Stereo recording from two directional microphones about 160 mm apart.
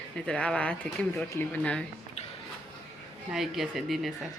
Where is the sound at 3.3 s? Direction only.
Centre (ahead or behind).